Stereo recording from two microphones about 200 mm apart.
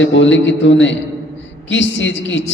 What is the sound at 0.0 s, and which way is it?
A man's voice, 65° left (ahead or behind).